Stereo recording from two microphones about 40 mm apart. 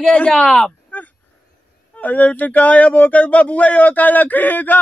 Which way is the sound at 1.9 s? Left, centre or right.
Left.